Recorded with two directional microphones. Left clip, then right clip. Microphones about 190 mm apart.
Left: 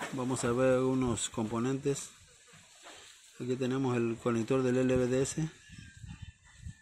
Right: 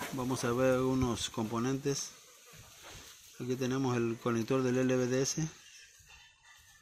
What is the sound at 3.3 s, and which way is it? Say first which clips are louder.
Speech: left 1 dB; 5° left (ahead or behind).